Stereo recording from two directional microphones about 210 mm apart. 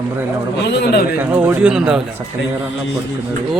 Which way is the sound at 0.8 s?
50° left (ahead or behind).